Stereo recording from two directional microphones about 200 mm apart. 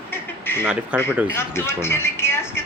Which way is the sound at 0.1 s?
10° left (ahead or behind).